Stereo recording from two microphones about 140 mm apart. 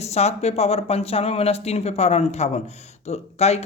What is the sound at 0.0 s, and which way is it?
Speech, 50° left (ahead or behind).